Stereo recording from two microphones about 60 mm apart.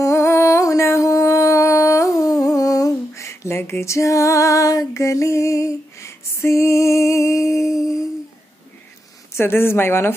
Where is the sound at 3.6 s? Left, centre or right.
Left.